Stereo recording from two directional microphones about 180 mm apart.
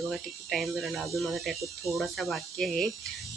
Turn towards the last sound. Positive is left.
turn(degrees=0)  # may be behind; listen again after turning